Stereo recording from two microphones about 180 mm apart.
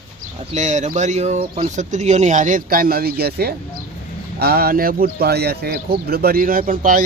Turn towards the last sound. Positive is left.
turn(degrees=-50)  # may be behind; listen again after turning